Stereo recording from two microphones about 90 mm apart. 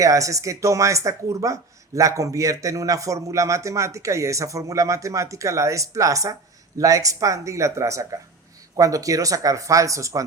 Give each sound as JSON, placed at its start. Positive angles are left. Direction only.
{"t": 0.0, "sound": "a man's voice", "side_deg": -40}